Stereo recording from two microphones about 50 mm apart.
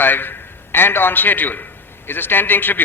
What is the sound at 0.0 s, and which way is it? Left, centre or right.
A man's voice, left.